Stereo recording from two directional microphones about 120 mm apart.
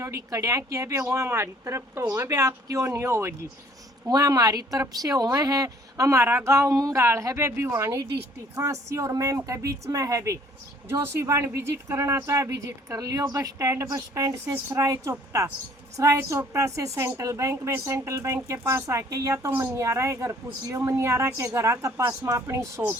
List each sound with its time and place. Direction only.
0.0 s speech: 25° right (ahead or behind)